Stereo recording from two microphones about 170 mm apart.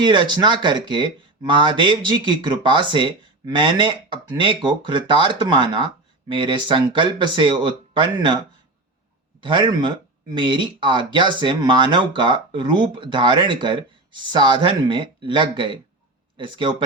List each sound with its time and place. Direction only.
0.0 s speech: 25° right (ahead or behind)
9.4 s speech: 30° right (ahead or behind)